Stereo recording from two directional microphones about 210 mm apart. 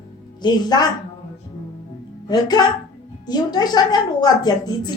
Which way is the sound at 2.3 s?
20° left (ahead or behind).